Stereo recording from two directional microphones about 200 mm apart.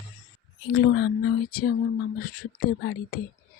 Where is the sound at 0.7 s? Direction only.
55° left (ahead or behind).